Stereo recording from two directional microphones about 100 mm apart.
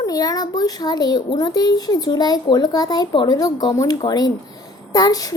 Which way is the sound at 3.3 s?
35° left (ahead or behind).